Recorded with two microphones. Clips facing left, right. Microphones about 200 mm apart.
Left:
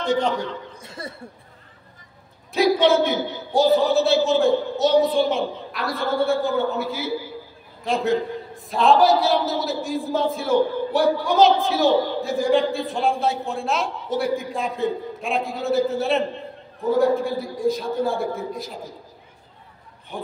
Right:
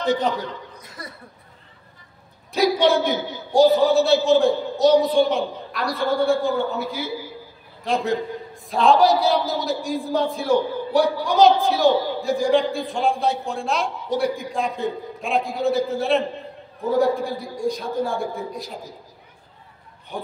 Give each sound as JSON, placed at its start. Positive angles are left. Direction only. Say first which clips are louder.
{"t": 0.7, "sound": "laughter", "louder": "left 4 dB", "side_deg": 25}
{"t": 2.5, "sound": "a sound", "louder": "left 1 dB", "side_deg": 0}
{"t": 3.0, "sound": "a man's voice", "louder": "left 1 dB", "side_deg": 0}